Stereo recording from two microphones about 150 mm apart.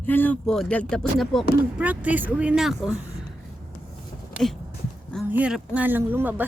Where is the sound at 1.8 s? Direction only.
10° right (ahead or behind).